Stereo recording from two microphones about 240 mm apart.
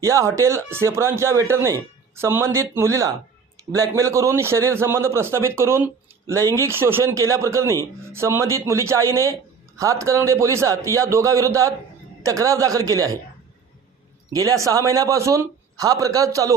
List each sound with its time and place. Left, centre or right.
0.0 s a man's voice: centre
14.3 s a man's voice: centre